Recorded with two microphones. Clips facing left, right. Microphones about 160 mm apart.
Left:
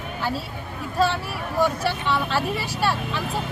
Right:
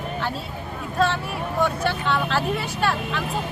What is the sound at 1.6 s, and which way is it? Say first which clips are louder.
Speech: left 1 dB; 5° left (ahead or behind).